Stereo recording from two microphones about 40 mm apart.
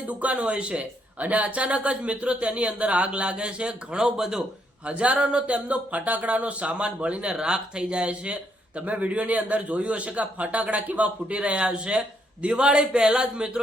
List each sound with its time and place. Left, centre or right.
0.1 s a man's voice: right; by 4.4 s centre
4.9 s a man's voice: right